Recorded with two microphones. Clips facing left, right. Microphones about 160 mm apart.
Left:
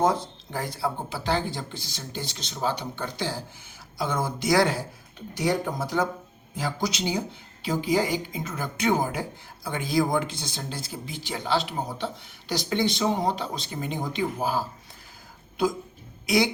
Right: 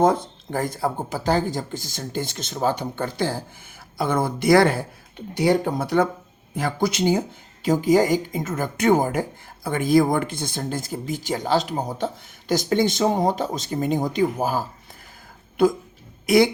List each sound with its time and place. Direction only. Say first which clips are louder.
0.0 s speech: right 5 dB; 50° right (ahead or behind)
16.2 s speech: right 7 dB; 50° right (ahead or behind)